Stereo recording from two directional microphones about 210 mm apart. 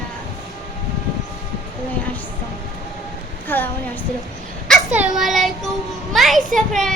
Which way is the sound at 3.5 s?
10° left (ahead or behind).